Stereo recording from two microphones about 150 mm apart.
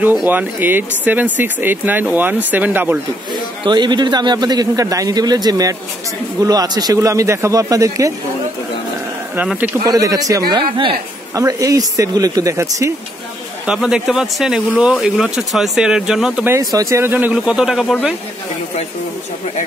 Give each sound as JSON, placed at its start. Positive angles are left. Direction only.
{"t": 0.3, "sound": "speech", "side_deg": -10}
{"t": 3.6, "sound": "a man's voice", "side_deg": -30}
{"t": 9.4, "sound": "speech", "side_deg": -10}
{"t": 9.8, "sound": "a man's voice", "side_deg": -25}
{"t": 10.5, "sound": "a woman's voice", "side_deg": -35}
{"t": 11.3, "sound": "a man's voice", "side_deg": -20}
{"t": 13.7, "sound": "speech", "side_deg": -5}
{"t": 16.4, "sound": "speech", "side_deg": -20}